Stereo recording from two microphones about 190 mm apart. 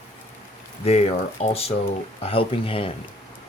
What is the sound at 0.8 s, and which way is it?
Speech, 30° left (ahead or behind).